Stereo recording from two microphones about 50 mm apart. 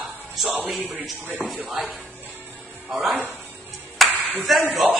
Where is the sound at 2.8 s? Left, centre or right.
Centre.